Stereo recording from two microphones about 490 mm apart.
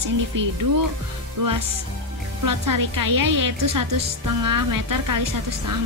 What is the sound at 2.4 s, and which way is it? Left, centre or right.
A woman's voice, right.